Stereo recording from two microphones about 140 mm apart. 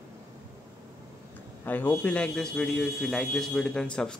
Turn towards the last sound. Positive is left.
turn(degrees=5)  # may be behind; listen again after turning